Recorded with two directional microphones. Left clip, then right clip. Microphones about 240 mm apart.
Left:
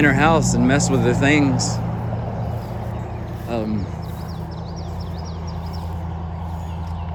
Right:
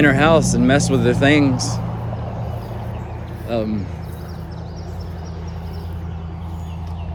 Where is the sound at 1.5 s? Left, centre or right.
Left.